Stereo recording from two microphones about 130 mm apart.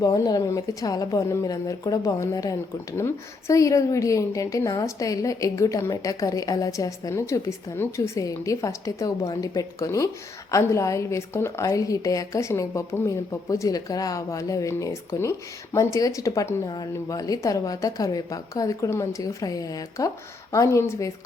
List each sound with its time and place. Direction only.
0.0 s a woman's voice: 25° left (ahead or behind)